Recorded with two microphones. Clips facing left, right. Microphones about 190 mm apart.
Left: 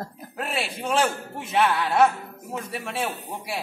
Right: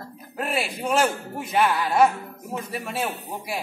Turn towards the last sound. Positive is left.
turn(degrees=-5)  # may be behind; listen again after turning